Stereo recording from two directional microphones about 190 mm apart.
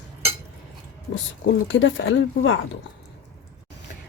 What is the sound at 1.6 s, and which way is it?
Speech, 80° left.